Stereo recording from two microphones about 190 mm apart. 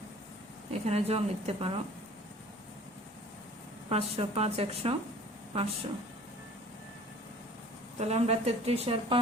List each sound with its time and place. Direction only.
0.7 s a woman's voice: 30° right (ahead or behind)
3.8 s a woman's voice: 30° right (ahead or behind)
7.9 s a woman's voice: 35° right (ahead or behind)